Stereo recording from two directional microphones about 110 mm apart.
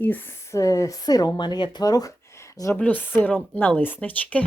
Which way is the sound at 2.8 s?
15° left (ahead or behind).